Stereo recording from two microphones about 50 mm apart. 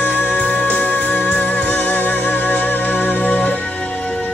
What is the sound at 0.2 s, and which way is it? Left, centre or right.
Music, left.